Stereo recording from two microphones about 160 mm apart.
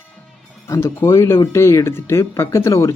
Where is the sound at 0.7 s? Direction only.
20° left (ahead or behind).